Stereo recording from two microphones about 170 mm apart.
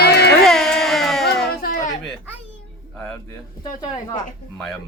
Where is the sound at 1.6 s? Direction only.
60° left (ahead or behind).